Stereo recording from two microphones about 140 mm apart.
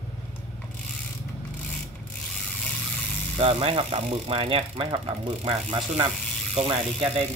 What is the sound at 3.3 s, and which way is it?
Speech, 40° right (ahead or behind).